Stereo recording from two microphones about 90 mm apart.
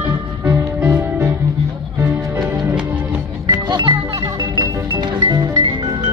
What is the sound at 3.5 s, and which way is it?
Music, 55° right (ahead or behind).